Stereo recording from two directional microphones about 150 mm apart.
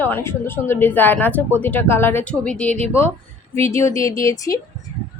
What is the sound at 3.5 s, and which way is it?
Speech, 20° left (ahead or behind).